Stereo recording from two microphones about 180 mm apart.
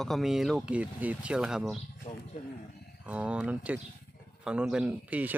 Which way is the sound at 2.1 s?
40° left (ahead or behind).